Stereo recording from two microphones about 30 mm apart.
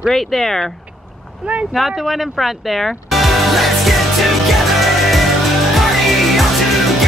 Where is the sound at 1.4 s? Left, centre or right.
Right.